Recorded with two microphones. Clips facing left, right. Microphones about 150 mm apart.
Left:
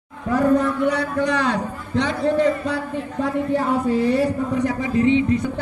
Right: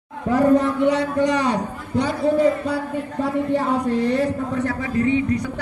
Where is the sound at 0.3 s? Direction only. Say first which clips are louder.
Right 1 dB; 25° right (ahead or behind).